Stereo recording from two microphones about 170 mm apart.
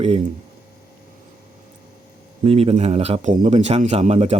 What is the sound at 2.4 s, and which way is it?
Speech, 35° right (ahead or behind).